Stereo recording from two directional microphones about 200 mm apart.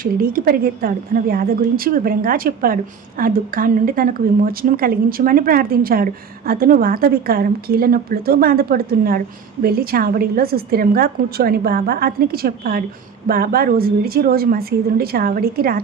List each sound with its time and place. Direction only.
0.0 s speech: 45° right (ahead or behind)